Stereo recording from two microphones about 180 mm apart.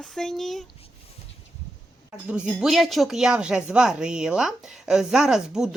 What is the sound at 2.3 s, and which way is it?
Speech, 5° right (ahead or behind).